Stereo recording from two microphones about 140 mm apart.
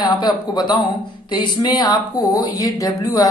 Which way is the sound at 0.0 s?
30° left (ahead or behind).